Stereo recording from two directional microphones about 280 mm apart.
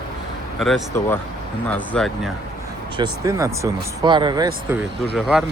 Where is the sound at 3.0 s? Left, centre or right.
Centre.